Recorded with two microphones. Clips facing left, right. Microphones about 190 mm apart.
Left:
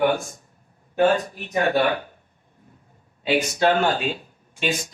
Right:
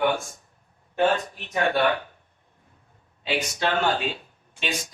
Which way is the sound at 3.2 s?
50° left (ahead or behind).